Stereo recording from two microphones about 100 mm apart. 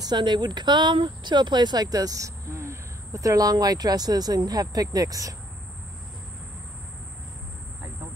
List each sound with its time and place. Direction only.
0.0 s speech: 50° right (ahead or behind)